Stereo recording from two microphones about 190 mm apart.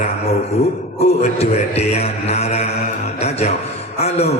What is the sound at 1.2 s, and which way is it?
A man's voice, 35° left (ahead or behind).